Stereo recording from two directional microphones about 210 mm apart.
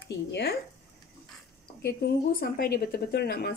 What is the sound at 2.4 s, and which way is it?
Speech, 50° left (ahead or behind).